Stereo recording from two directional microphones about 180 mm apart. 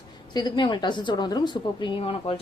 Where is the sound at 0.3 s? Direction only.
25° left (ahead or behind).